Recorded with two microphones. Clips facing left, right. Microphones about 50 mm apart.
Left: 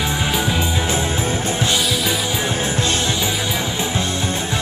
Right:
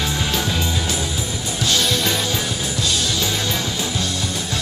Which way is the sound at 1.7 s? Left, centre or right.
Centre.